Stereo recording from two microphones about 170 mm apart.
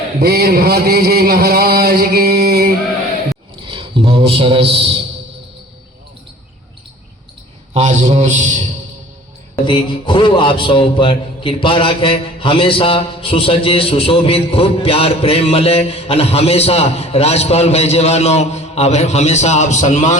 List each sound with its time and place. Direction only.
0.2 s a sound: 65° right (ahead or behind)
3.7 s a man's voice: 30° right (ahead or behind)
7.7 s a man's voice: 40° right (ahead or behind)
9.6 s a man's voice: 30° left (ahead or behind); by 20.1 s 45° left (ahead or behind)